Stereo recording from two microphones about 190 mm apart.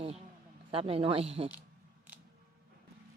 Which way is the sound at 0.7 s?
30° right (ahead or behind).